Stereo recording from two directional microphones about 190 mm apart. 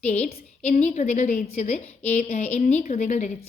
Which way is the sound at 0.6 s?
35° left (ahead or behind).